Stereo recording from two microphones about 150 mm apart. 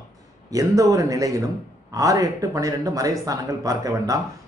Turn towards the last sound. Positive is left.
turn(degrees=-20)  # may be behind; listen again after turning